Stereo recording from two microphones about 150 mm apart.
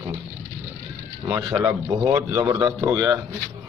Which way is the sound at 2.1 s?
25° right (ahead or behind).